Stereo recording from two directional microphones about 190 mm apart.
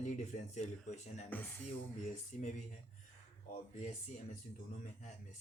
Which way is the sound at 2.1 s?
40° left (ahead or behind).